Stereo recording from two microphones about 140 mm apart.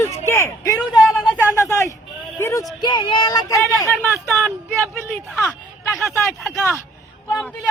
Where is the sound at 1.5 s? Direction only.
20° left (ahead or behind).